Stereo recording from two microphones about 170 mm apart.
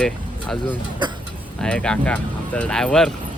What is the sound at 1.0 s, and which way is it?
Speech, 25° right (ahead or behind).